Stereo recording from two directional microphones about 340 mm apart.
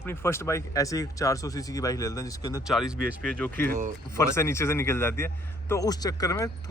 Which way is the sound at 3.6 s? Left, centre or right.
Right.